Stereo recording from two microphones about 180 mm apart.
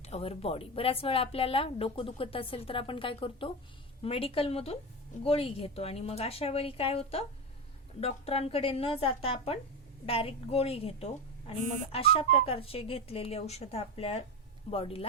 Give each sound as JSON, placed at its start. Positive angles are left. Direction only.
{"t": 0.0, "sound": "speech", "side_deg": 35}